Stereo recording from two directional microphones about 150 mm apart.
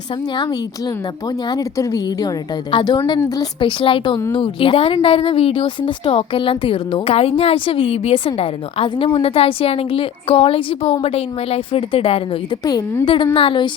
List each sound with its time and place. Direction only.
1.5 s a woman's voice: 25° left (ahead or behind)